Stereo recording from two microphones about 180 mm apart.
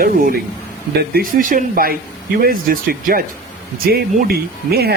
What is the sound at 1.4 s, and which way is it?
Speech, 50° right (ahead or behind).